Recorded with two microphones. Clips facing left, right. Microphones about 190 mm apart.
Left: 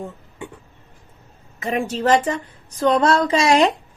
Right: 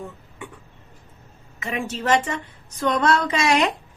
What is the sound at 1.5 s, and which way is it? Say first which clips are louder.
A woman's voice: left 5 dB; 35° left (ahead or behind).